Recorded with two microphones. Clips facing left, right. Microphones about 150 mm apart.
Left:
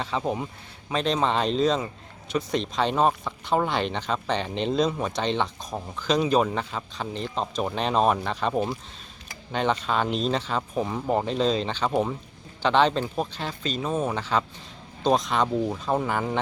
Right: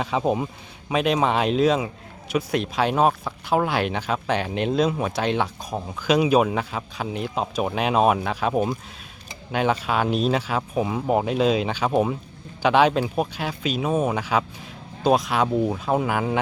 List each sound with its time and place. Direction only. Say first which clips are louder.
0.0 s speech: right 5 dB; 15° right (ahead or behind)